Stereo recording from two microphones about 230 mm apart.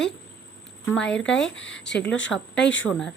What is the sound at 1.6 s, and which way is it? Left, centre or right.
Speech, left.